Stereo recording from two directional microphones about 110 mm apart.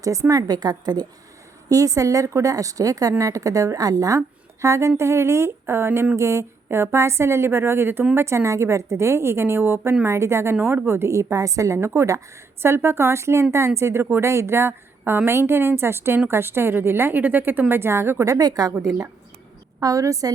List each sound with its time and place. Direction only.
0.0 s a woman's voice: 30° right (ahead or behind)
18.3 s a woman's voice: 35° right (ahead or behind)
19.8 s a woman's voice: 30° right (ahead or behind)